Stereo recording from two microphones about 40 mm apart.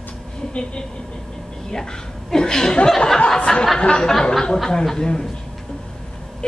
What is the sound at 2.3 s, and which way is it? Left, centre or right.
A woman's voice, centre.